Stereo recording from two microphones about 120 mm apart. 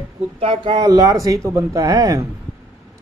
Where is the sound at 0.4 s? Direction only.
45° right (ahead or behind); by 2.2 s 30° right (ahead or behind).